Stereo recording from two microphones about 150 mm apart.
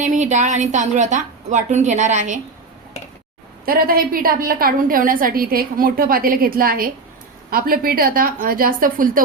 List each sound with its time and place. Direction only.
0.0 s a woman's voice: 55° right (ahead or behind)
3.7 s a woman's voice: 75° right (ahead or behind)